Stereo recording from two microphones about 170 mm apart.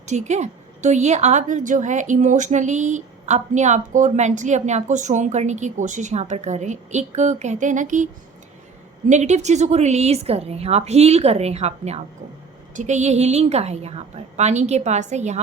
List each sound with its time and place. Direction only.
0.0 s a woman's voice: 40° right (ahead or behind)